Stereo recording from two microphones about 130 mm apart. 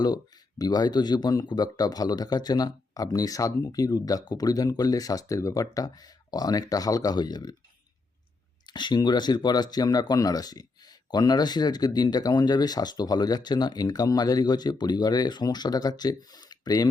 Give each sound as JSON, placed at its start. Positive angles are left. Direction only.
{"t": 0.6, "sound": "speech", "side_deg": 30}
{"t": 8.7, "sound": "speech", "side_deg": 35}